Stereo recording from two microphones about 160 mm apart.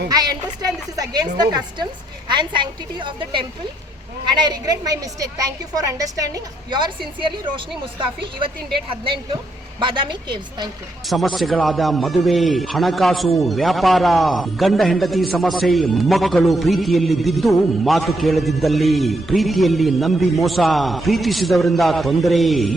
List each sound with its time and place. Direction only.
0.1 s a woman's voice: 25° right (ahead or behind)
9.8 s a woman's voice: 30° right (ahead or behind)
11.1 s a man's voice: centre (ahead or behind)